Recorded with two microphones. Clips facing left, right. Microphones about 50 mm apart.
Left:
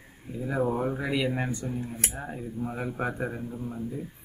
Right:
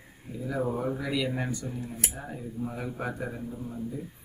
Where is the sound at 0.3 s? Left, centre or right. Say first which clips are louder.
Left 3 dB; centre.